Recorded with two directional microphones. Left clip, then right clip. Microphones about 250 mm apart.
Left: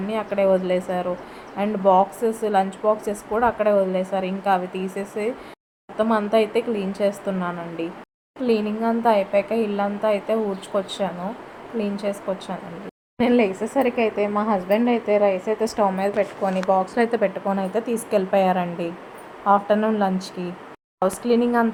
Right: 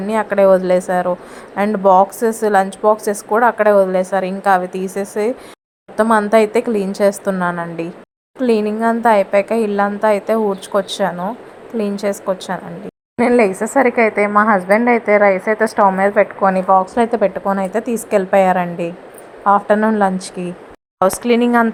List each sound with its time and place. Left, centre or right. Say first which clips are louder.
0.1 s speech: right 8 dB; right
13.8 s a woman's voice: right 8 dB; right
14.3 s a woman's voice: right 10 dB; centre
15.2 s a woman's voice: right 7 dB; right
15.6 s a woman's voice: right 9 dB; centre